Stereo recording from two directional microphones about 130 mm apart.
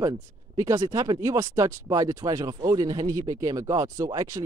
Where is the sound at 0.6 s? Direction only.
30° right (ahead or behind).